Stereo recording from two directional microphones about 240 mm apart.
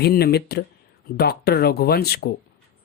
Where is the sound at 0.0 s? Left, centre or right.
Left.